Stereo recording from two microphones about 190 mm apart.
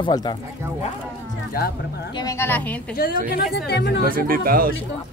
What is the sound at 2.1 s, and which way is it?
Speech, 15° left (ahead or behind).